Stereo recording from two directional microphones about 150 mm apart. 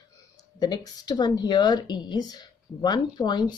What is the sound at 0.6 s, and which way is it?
Speech, 25° left (ahead or behind).